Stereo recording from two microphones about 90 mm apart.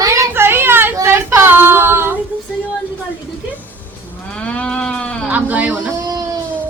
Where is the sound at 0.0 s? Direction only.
35° right (ahead or behind).